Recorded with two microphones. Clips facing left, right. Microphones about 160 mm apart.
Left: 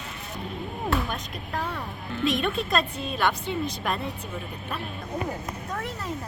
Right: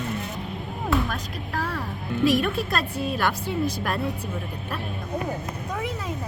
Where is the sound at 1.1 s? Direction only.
Centre (ahead or behind).